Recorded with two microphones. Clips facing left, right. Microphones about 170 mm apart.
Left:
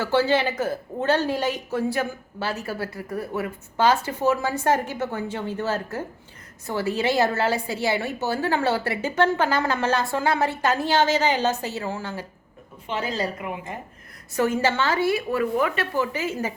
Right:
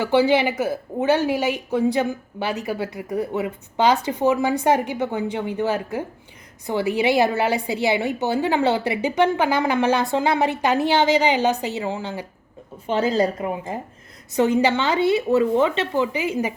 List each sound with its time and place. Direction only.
0.0 s speech: 15° right (ahead or behind)
12.9 s a woman's voice: 35° right (ahead or behind)
14.3 s a woman's voice: 20° right (ahead or behind)